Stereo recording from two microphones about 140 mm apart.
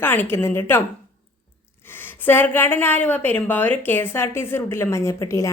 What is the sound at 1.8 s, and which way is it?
A woman's voice, 15° left (ahead or behind).